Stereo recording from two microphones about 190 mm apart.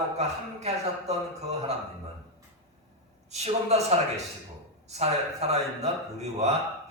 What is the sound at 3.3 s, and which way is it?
Speech, 35° right (ahead or behind).